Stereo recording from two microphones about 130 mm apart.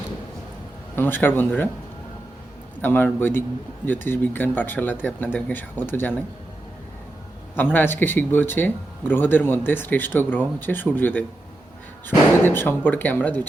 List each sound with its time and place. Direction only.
0.9 s speech: 15° left (ahead or behind)
2.8 s speech: 15° left (ahead or behind)
7.5 s speech: 15° left (ahead or behind)